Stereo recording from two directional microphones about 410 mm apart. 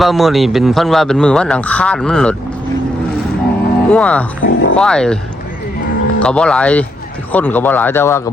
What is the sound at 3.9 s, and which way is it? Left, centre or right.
Speech, centre.